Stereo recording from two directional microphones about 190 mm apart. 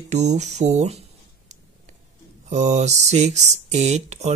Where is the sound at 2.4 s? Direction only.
35° right (ahead or behind).